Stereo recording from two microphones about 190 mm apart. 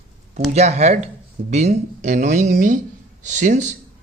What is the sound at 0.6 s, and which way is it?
A man's voice, 35° right (ahead or behind).